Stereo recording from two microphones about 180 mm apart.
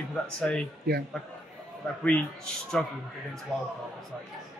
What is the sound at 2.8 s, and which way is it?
Speech, 5° left (ahead or behind).